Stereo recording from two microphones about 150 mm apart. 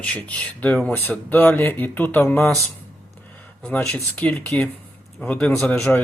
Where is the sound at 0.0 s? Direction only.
10° left (ahead or behind).